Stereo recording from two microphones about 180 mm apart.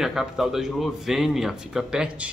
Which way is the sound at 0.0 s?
Centre (ahead or behind).